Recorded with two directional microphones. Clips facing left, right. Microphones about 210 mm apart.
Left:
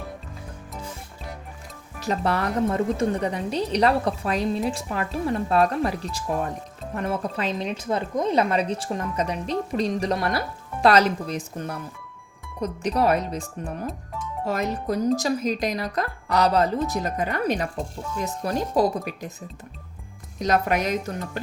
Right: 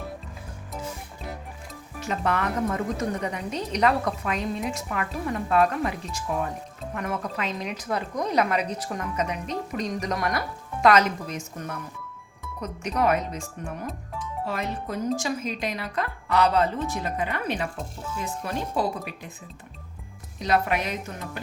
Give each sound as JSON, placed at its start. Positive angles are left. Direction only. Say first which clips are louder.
{"t": 2.0, "sound": "a woman's voice", "louder": "left 2 dB", "side_deg": 35}
{"t": 14.4, "sound": "a woman's voice", "louder": "left 6 dB", "side_deg": 40}
{"t": 20.4, "sound": "speech", "louder": "left 2 dB", "side_deg": 40}